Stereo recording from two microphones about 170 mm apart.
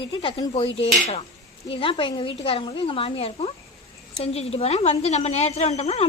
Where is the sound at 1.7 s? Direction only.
30° left (ahead or behind).